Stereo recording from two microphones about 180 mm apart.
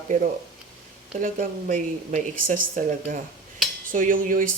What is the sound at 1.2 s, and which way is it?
Speech, 50° right (ahead or behind).